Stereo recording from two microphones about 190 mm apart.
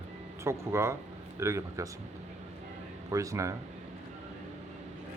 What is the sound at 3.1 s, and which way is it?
Rub, 15° right (ahead or behind).